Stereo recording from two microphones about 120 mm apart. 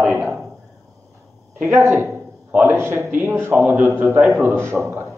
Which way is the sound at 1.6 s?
20° right (ahead or behind).